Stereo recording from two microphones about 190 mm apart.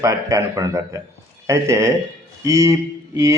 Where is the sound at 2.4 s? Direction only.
15° right (ahead or behind).